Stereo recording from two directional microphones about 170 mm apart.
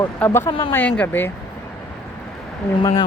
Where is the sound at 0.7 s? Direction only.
10° left (ahead or behind).